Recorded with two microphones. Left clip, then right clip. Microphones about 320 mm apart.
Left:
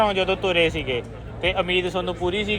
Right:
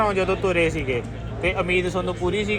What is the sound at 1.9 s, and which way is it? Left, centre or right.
Speech, left.